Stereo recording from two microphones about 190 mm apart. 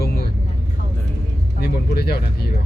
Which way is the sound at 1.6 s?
55° left (ahead or behind).